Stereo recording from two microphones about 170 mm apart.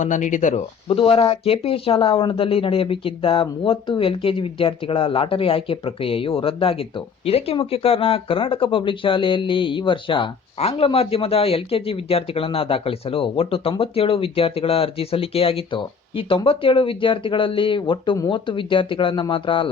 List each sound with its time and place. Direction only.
0.0 s speech: 50° left (ahead or behind)
0.9 s speech: 30° left (ahead or behind)